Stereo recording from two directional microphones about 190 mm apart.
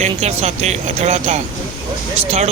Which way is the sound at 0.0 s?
35° right (ahead or behind).